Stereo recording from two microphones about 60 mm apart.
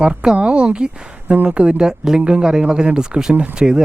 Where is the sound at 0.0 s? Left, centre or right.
Centre.